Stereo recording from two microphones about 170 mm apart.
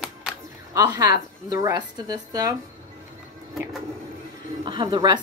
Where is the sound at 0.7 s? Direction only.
20° right (ahead or behind).